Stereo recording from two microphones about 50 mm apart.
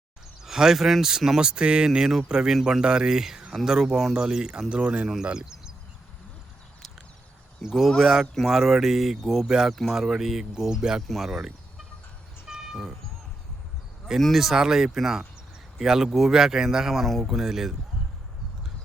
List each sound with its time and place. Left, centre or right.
0.4 s speech: centre
7.6 s speech: centre
9.7 s speech: centre
12.5 s vehicle: centre
14.2 s speech: centre